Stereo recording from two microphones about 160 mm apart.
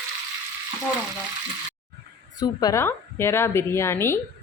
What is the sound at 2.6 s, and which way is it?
A woman's voice, 20° left (ahead or behind).